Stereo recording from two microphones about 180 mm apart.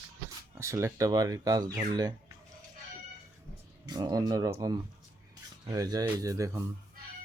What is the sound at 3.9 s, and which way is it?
Speech, 20° right (ahead or behind).